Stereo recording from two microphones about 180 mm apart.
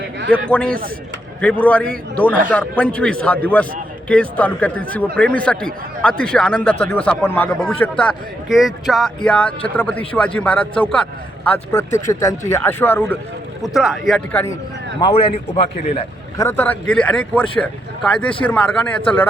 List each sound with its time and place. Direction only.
0.5 s a man's voice: 5° left (ahead or behind)
13.6 s speech: centre (ahead or behind)
15.0 s a man's voice: 30° left (ahead or behind)
16.4 s a man's voice: 10° left (ahead or behind)